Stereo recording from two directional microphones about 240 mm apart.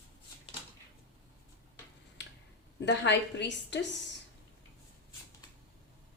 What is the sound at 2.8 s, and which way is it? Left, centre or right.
A woman's voice, left.